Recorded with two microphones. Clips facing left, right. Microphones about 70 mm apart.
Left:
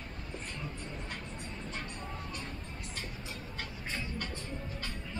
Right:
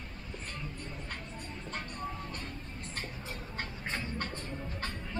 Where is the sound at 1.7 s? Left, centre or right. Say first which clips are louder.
Right 5 dB; right.